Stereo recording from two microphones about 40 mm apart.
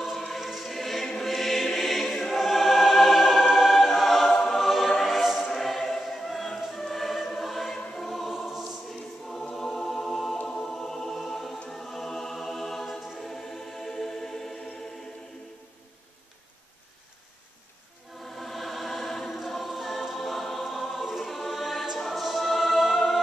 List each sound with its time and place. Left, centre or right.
0.2 s choir: centre
8.0 s music: centre
9.6 s music: centre
10.3 s music: centre
10.6 s music: centre
11.7 s choir: centre
13.3 s music: centre
18.2 s music: centre
19.2 s choir: centre
21.9 s music: centre